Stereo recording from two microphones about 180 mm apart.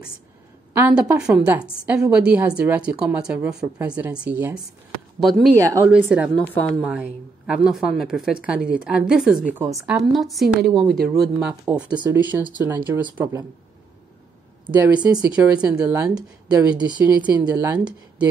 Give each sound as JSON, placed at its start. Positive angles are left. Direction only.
{"t": 0.7, "sound": "a woman's voice", "side_deg": -10}
{"t": 5.6, "sound": "speech", "side_deg": -20}
{"t": 5.9, "sound": "a woman's voice", "side_deg": -5}
{"t": 6.4, "sound": "a woman's voice", "side_deg": 10}
{"t": 11.9, "sound": "speech", "side_deg": -25}
{"t": 12.6, "sound": "speech", "side_deg": -10}
{"t": 15.0, "sound": "speech", "side_deg": -25}
{"t": 15.2, "sound": "a woman's voice", "side_deg": -5}